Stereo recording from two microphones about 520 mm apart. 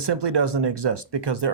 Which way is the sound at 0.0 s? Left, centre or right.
Right.